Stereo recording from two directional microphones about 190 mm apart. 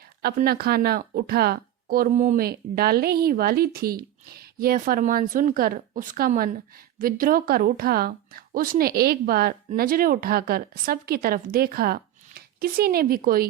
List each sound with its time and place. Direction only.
0.2 s a woman's voice: 55° right (ahead or behind)